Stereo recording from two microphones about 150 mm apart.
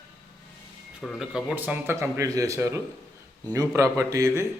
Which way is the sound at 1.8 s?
20° right (ahead or behind).